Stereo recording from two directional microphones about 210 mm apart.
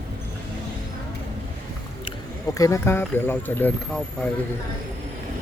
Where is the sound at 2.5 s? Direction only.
15° left (ahead or behind).